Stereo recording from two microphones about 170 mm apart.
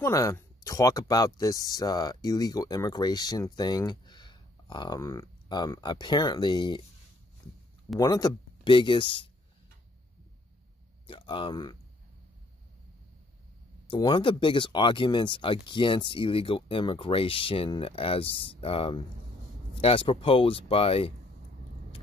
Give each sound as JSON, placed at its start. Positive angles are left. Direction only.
{"t": 0.0, "sound": "speech", "side_deg": 20}
{"t": 8.0, "sound": "speech", "side_deg": 20}
{"t": 11.1, "sound": "speech", "side_deg": 30}
{"t": 13.8, "sound": "speech", "side_deg": 25}